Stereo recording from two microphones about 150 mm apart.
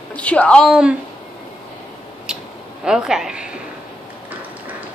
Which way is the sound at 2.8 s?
5° right (ahead or behind).